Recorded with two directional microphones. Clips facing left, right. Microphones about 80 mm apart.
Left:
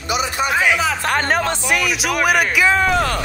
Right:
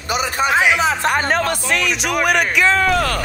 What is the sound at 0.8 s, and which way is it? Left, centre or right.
Speech, right.